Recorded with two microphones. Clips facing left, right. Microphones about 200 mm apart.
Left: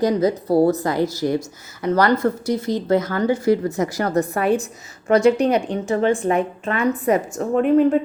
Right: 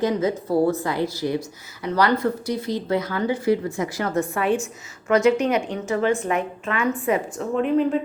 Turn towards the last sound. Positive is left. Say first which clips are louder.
# left 5 dB
turn(degrees=50)  # may be behind; listen again after turning